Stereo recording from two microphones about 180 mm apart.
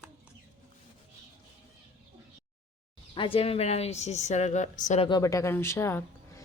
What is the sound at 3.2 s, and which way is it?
A woman's voice, 30° left (ahead or behind).